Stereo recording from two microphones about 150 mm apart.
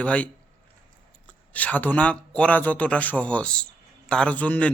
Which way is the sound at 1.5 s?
10° left (ahead or behind).